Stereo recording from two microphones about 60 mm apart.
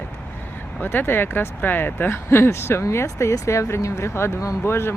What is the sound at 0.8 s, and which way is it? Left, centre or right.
Speech, left.